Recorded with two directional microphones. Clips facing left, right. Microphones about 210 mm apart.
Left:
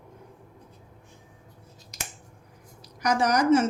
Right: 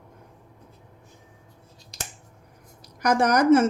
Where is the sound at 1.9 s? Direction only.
30° right (ahead or behind).